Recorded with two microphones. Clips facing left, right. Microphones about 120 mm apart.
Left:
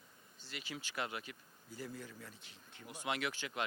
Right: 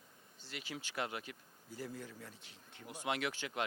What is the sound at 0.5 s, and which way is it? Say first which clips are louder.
Speech: right 1 dB; 45° right (ahead or behind).